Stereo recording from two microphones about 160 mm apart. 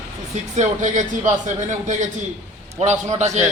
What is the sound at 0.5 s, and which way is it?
A man's voice, 50° right (ahead or behind).